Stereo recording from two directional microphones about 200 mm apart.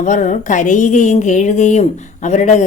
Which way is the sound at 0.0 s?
40° left (ahead or behind).